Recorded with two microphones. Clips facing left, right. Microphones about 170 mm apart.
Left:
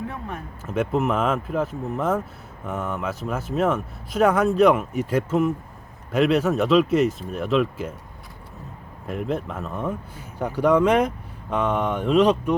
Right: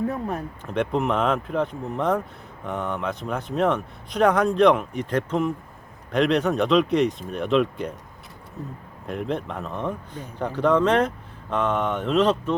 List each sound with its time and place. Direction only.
0.1 s speech: 40° right (ahead or behind)
0.6 s speech: 5° left (ahead or behind)
9.0 s speech: centre (ahead or behind)